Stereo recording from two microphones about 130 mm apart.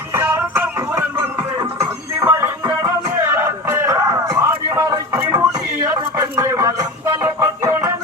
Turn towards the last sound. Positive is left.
turn(degrees=-25)  # may be behind; listen again after turning